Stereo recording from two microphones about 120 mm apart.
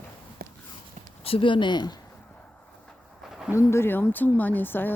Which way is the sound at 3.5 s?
20° left (ahead or behind).